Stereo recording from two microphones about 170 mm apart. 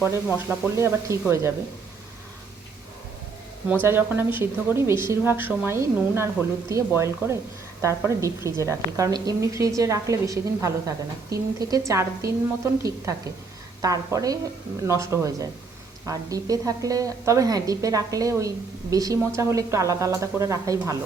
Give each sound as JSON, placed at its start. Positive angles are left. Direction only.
{"t": 0.0, "sound": "a woman's voice", "side_deg": -10}
{"t": 3.7, "sound": "a woman's voice", "side_deg": -10}